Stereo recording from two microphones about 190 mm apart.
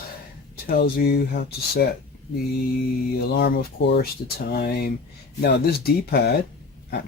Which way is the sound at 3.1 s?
55° left (ahead or behind).